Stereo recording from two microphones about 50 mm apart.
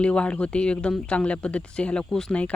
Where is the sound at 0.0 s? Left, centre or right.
Left.